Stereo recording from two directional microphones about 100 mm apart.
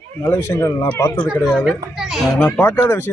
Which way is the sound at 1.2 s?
5° right (ahead or behind).